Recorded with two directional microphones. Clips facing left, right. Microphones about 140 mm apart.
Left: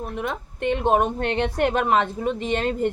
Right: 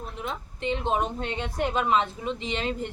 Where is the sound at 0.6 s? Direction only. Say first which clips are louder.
Left 6 dB; 55° left (ahead or behind).